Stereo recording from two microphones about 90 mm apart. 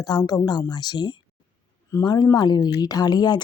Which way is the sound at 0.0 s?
45° left (ahead or behind).